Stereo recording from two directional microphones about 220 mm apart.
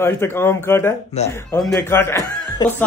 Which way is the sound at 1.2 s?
30° left (ahead or behind).